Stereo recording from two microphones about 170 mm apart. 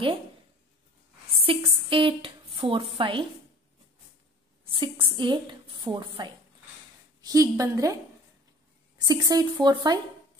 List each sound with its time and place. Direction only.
1.4 s a woman's voice: 30° right (ahead or behind)
4.7 s a woman's voice: 30° right (ahead or behind)
9.0 s a woman's voice: 20° right (ahead or behind)